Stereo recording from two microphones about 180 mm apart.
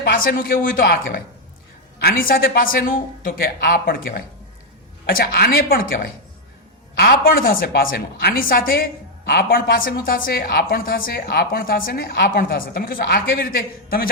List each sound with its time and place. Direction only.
0.0 s a woman's voice: 55° left (ahead or behind)